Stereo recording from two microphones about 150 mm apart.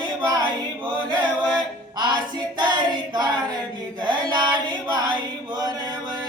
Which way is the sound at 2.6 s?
30° right (ahead or behind).